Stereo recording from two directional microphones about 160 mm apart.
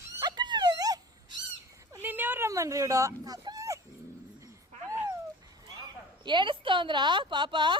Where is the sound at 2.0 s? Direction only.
10° right (ahead or behind).